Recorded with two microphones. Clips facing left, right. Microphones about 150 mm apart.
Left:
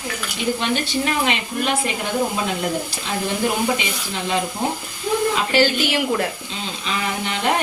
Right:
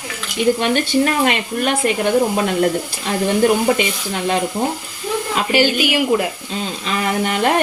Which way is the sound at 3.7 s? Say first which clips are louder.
Right 6 dB; 55° right (ahead or behind).